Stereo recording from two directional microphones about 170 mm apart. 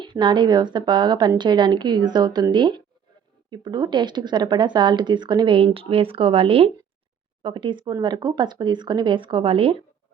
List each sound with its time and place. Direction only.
0.0 s speech: 25° right (ahead or behind)